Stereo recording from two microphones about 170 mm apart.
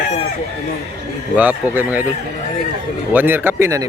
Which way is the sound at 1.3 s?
10° right (ahead or behind).